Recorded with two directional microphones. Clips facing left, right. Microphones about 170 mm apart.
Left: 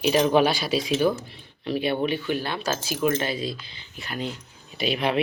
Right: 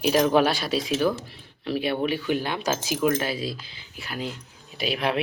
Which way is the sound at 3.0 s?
5° right (ahead or behind).